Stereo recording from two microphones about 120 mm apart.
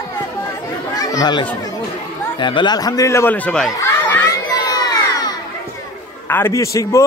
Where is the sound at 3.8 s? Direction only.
20° left (ahead or behind).